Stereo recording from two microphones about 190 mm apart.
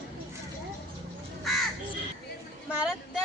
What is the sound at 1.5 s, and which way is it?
Crow, centre (ahead or behind).